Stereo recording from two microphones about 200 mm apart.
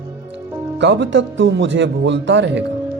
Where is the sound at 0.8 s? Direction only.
60° right (ahead or behind).